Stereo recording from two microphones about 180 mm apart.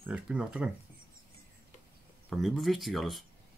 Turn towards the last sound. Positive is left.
turn(degrees=0)  # may be behind; listen again after turning